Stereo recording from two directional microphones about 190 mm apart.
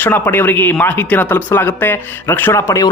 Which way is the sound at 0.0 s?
10° left (ahead or behind).